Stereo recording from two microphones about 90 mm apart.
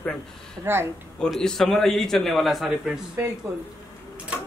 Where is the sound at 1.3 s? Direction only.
5° left (ahead or behind).